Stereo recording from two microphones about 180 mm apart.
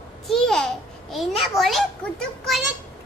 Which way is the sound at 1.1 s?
Centre (ahead or behind).